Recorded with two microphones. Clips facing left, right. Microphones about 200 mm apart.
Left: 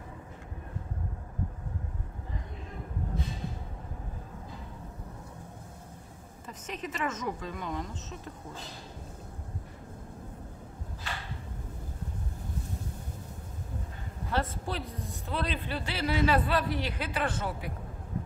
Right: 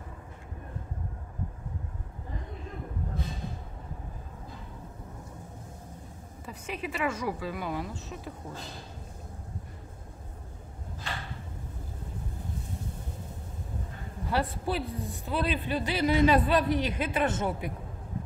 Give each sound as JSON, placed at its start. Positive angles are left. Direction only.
{"t": 6.4, "sound": "speech", "side_deg": -10}
{"t": 14.3, "sound": "a man's voice", "side_deg": -15}